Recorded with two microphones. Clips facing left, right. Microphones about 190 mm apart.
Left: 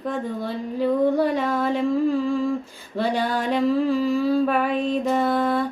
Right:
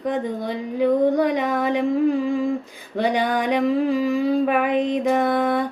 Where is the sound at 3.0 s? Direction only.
15° right (ahead or behind).